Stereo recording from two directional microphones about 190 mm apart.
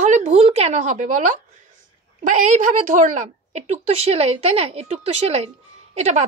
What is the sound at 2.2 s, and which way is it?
A woman's voice, 40° right (ahead or behind).